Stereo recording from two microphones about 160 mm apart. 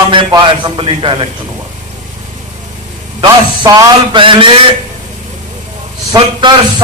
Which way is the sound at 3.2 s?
25° right (ahead or behind).